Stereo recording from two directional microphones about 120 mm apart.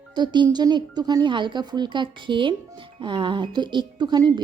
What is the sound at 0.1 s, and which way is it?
A child's voice, 40° right (ahead or behind).